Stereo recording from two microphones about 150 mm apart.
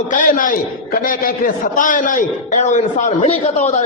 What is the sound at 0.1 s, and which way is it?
A man's voice, 65° left (ahead or behind).